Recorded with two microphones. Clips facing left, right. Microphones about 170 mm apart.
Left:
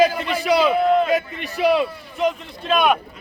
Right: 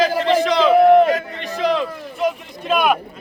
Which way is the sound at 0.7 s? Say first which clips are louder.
Right 7 dB; 60° right (ahead or behind).